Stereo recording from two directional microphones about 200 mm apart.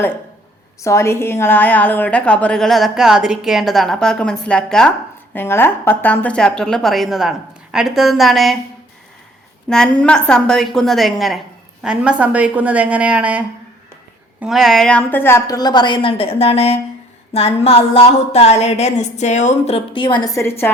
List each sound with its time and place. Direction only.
0.8 s a woman's voice: 15° left (ahead or behind)
9.6 s a woman's voice: 5° left (ahead or behind)
14.4 s a woman's voice: centre (ahead or behind)